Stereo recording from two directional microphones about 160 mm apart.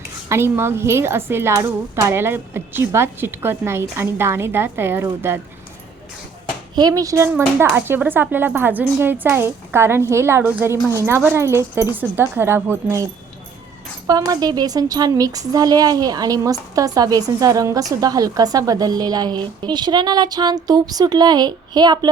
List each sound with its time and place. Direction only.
0.3 s a woman's voice: 15° right (ahead or behind)
6.7 s a woman's voice: 25° right (ahead or behind)
14.1 s a woman's voice: 25° right (ahead or behind)